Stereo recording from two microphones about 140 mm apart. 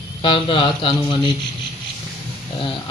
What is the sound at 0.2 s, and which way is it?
Speech, 35° left (ahead or behind).